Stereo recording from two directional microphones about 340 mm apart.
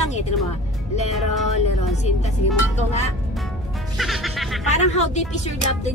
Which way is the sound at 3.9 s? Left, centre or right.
Centre.